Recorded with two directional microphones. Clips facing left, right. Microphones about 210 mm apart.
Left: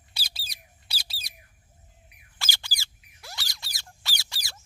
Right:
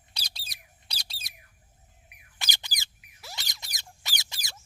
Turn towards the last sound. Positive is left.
turn(degrees=-20)  # may be behind; listen again after turning